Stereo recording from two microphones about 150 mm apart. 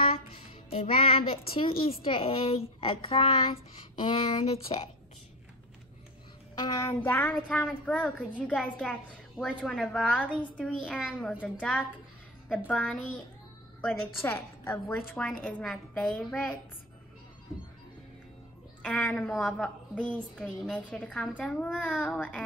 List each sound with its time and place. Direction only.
0.7 s a child's voice: 40° left (ahead or behind)
6.5 s a child's voice: 25° left (ahead or behind)
7.0 s a woman's voice: 10° left (ahead or behind)
12.4 s a woman's voice: 5° left (ahead or behind)
18.8 s a woman's voice: 5° left (ahead or behind)